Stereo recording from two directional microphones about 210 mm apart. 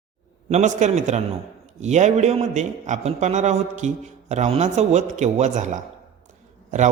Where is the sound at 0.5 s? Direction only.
35° right (ahead or behind).